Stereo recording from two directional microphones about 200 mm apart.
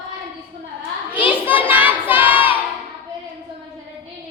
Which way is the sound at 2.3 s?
25° left (ahead or behind).